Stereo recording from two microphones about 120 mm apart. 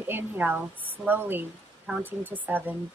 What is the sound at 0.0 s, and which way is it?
Speech, 15° right (ahead or behind).